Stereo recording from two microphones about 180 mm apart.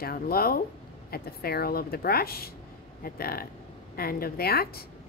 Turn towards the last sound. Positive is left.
turn(degrees=60)  # may be behind; listen again after turning